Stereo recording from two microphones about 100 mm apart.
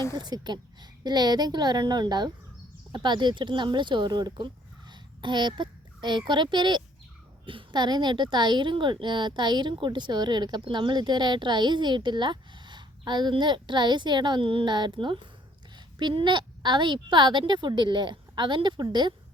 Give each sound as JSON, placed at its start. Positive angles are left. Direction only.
{"t": 0.2, "sound": "speech", "side_deg": -45}